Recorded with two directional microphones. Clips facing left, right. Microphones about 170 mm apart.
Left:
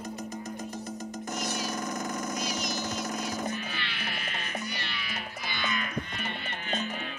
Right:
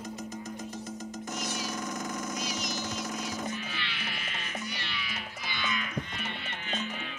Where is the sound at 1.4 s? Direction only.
60° left (ahead or behind).